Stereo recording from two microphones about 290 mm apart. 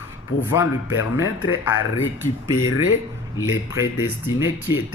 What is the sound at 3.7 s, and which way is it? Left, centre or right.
Speech, centre.